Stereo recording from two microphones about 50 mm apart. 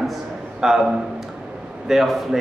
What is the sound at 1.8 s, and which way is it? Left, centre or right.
Speech, centre.